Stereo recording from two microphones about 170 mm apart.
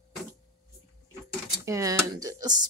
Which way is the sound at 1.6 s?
20° right (ahead or behind).